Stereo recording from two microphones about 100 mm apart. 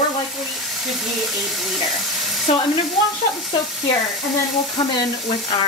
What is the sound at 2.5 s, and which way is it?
Frying, 90° left.